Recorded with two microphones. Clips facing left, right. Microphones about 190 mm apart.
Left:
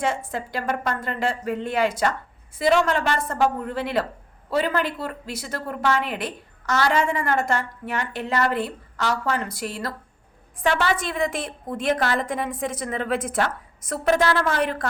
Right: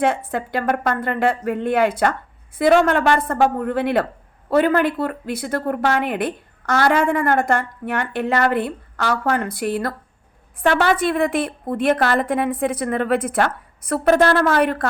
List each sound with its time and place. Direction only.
0.0 s a woman's voice: 60° right (ahead or behind)